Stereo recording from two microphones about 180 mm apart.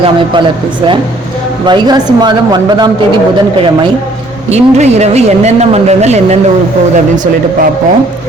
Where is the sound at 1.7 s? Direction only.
25° right (ahead or behind).